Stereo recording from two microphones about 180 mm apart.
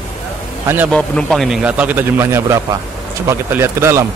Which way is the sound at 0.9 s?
5° left (ahead or behind).